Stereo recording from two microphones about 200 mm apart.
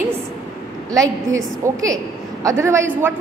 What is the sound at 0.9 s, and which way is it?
A woman's voice, 15° right (ahead or behind).